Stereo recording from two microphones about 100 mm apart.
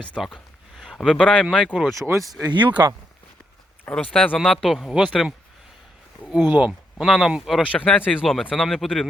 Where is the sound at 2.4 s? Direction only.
50° right (ahead or behind).